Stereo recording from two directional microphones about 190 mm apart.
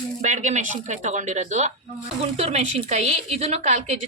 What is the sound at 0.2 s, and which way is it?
A woman's voice, 40° right (ahead or behind).